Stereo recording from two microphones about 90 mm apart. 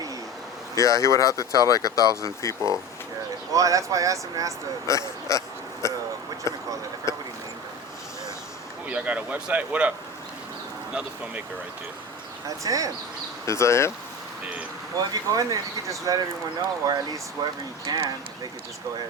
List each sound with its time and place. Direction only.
0.8 s speech: 35° left (ahead or behind)
3.5 s speech: 40° right (ahead or behind)
4.9 s speech: 35° left (ahead or behind)
5.8 s a sound: 35° left (ahead or behind)
8.9 s speech: 15° right (ahead or behind)
12.6 s speech: 40° right (ahead or behind)
13.4 s speech: 35° left (ahead or behind)
14.9 s speech: 40° right (ahead or behind)